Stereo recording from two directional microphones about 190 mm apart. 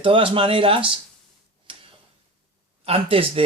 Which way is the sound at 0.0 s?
25° right (ahead or behind).